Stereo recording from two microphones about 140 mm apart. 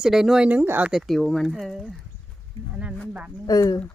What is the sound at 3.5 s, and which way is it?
Speech, 25° left (ahead or behind).